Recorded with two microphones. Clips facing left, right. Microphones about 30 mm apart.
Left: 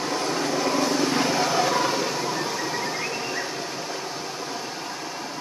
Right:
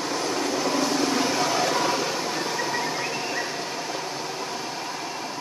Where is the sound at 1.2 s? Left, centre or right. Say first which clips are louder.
Left 1 dB; centre.